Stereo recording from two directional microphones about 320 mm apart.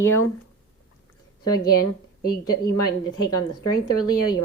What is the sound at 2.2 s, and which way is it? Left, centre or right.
Speech, left.